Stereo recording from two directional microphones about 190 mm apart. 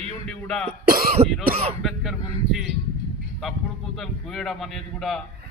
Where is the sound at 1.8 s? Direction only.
Centre (ahead or behind).